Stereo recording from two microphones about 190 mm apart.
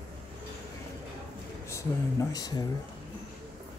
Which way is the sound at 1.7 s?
20° left (ahead or behind).